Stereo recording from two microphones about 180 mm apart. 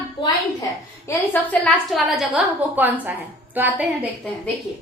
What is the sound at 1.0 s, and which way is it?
A woman's voice, 10° left (ahead or behind).